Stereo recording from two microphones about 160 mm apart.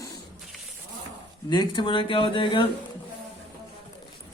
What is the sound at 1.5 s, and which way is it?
Speech, 30° left (ahead or behind).